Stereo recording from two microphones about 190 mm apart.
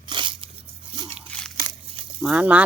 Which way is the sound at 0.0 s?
25° right (ahead or behind).